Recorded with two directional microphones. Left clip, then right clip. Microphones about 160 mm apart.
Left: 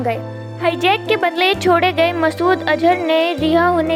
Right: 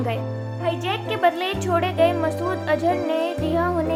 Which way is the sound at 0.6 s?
45° left (ahead or behind).